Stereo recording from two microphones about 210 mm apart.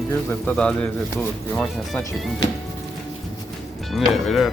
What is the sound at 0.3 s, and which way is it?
Speech, 5° left (ahead or behind).